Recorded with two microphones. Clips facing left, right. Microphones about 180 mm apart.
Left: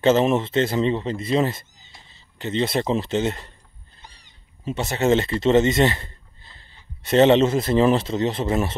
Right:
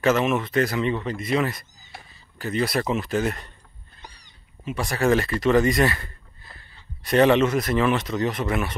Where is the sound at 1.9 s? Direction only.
75° right (ahead or behind).